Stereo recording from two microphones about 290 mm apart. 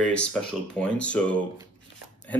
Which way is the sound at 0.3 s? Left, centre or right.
Centre.